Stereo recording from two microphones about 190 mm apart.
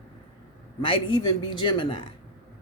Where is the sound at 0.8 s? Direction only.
25° left (ahead or behind).